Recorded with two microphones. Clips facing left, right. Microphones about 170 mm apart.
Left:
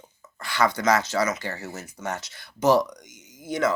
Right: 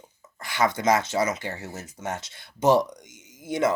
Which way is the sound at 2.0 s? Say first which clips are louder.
Even; 25° right (ahead or behind).